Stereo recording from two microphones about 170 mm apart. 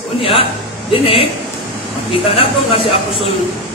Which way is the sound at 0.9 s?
35° left (ahead or behind).